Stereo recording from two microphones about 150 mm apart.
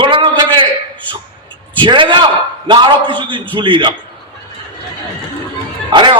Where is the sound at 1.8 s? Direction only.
30° right (ahead or behind).